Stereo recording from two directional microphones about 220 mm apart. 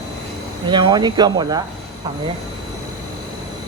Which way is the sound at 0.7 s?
20° right (ahead or behind).